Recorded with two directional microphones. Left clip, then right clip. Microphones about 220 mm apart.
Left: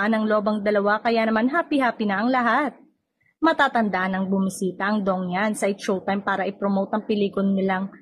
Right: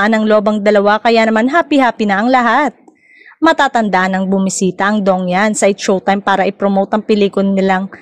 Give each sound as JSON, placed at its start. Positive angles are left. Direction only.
{"t": 0.0, "sound": "a woman's voice", "side_deg": -40}